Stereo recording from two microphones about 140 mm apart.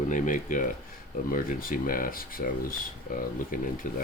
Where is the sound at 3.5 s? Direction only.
80° left.